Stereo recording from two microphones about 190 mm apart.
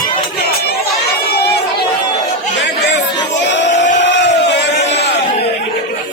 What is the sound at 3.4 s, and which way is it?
Crowd, 70° left (ahead or behind).